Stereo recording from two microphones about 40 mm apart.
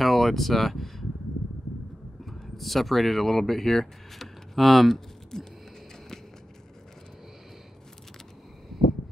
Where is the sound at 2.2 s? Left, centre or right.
Centre.